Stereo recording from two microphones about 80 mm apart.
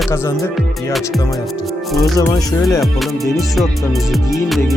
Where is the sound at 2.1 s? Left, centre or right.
Left.